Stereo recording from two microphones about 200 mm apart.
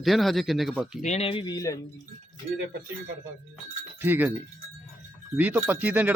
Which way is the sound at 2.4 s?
35° right (ahead or behind).